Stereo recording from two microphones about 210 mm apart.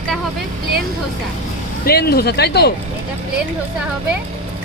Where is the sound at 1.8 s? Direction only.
50° left (ahead or behind).